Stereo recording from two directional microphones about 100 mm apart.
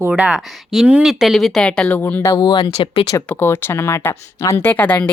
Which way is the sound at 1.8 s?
20° left (ahead or behind).